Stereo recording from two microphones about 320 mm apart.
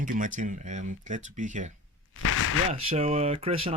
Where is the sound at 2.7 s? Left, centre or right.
Centre.